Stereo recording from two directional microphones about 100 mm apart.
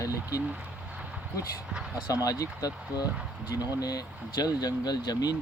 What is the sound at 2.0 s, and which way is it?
Speech, 35° left (ahead or behind).